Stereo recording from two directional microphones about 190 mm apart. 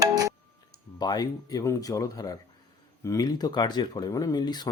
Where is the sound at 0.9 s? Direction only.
20° left (ahead or behind).